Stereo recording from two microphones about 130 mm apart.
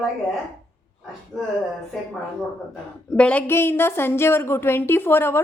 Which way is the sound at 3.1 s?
10° left (ahead or behind).